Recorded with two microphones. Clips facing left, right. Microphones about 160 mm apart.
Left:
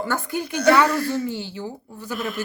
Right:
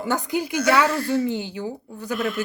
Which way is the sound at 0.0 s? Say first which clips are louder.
Right 2 dB; 15° right (ahead or behind).